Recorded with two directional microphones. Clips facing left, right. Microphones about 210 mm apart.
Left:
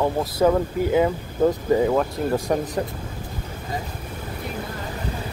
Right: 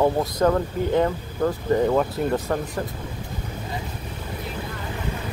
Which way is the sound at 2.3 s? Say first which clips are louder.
Left 2 dB; 15° left (ahead or behind).